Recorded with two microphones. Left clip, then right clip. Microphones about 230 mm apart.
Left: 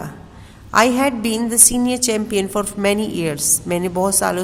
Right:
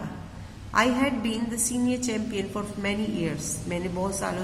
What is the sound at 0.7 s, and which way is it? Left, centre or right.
A woman's voice, left.